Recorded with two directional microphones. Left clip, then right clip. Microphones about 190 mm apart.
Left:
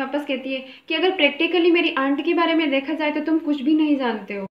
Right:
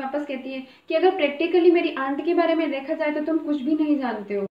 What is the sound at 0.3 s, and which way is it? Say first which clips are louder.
A woman's voice: left 6 dB; 50° left (ahead or behind).